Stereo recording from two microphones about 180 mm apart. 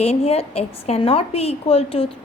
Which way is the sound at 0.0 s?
35° left (ahead or behind).